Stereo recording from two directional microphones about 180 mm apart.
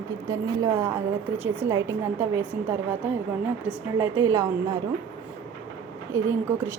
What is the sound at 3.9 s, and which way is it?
Speech, 15° right (ahead or behind).